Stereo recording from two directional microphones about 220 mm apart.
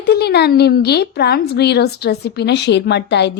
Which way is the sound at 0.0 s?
45° left (ahead or behind).